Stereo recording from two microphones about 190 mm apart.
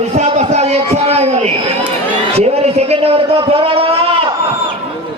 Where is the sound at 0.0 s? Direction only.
35° right (ahead or behind).